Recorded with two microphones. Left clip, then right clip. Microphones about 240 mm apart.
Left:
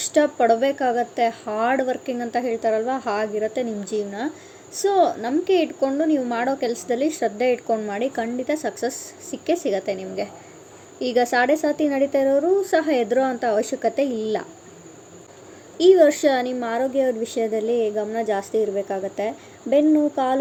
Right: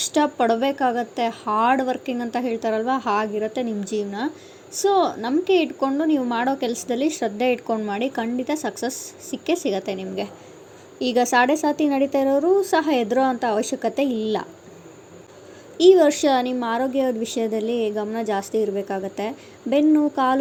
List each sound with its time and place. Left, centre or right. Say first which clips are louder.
0.0 s a woman's voice: left 2 dB; right
15.8 s a woman's voice: even; centre